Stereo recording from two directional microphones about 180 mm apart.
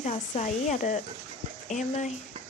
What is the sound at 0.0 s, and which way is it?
Speech, 40° left (ahead or behind).